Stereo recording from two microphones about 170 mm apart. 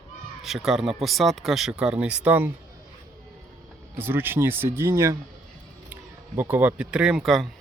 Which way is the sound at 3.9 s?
10° right (ahead or behind).